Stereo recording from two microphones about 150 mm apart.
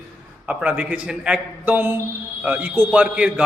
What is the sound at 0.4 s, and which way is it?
A man's voice, 10° right (ahead or behind).